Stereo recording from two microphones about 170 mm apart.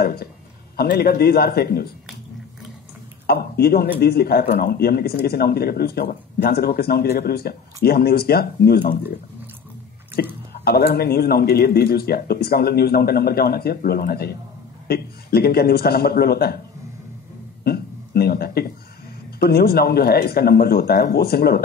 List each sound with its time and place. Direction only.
0.0 s speech: 65° left (ahead or behind)
3.3 s speech: 65° left (ahead or behind)
10.5 s speech: 70° left (ahead or behind)
17.6 s speech: 65° left (ahead or behind)